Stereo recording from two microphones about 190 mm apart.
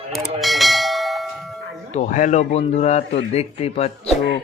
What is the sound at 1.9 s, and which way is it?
Speech, 40° left (ahead or behind).